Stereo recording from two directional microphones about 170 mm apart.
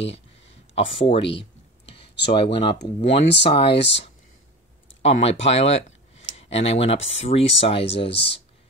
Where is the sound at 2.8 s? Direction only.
75° left (ahead or behind).